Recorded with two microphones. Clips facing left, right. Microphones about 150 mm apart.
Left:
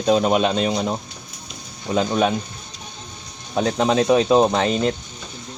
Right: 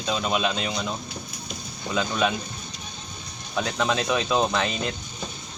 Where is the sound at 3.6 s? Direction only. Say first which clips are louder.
Left 7 dB; 35° left (ahead or behind).